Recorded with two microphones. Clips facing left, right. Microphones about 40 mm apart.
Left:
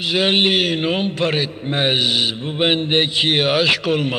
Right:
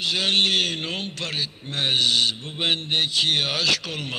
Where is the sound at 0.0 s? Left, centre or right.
Left.